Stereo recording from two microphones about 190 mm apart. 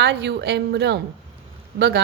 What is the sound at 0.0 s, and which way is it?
A woman's voice, 65° right (ahead or behind).